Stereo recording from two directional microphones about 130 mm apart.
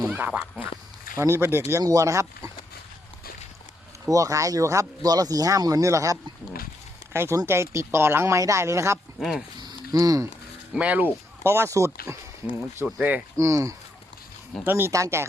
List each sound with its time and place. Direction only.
0.1 s speech: 10° right (ahead or behind)
1.2 s speech: 20° right (ahead or behind)
4.0 s speech: 25° right (ahead or behind)
9.6 s a sound: 30° right (ahead or behind)
10.8 s speech: 10° right (ahead or behind)
13.3 s speech: 25° right (ahead or behind)